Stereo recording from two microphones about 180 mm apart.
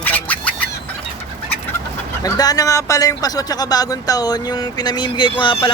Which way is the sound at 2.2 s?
20° left (ahead or behind).